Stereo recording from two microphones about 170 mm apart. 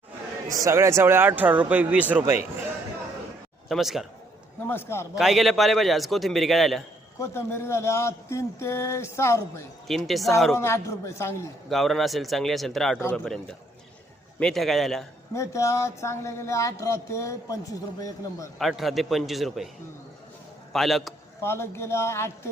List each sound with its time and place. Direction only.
0.4 s speech: 20° right (ahead or behind)
3.7 s a man's voice: centre (ahead or behind)
4.6 s speech: 15° left (ahead or behind)
5.1 s a man's voice: centre (ahead or behind)
7.2 s speech: 15° left (ahead or behind)
9.8 s a man's voice: centre (ahead or behind)
10.5 s speech: 15° left (ahead or behind)
11.7 s a man's voice: centre (ahead or behind)
13.0 s speech: 10° left (ahead or behind)
14.3 s a man's voice: 5° left (ahead or behind)
15.3 s speech: 15° left (ahead or behind)
18.6 s a man's voice: centre (ahead or behind)
20.7 s a man's voice: centre (ahead or behind)
21.4 s speech: 15° left (ahead or behind)